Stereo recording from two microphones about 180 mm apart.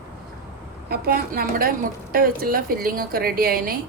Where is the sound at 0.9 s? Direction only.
55° right (ahead or behind).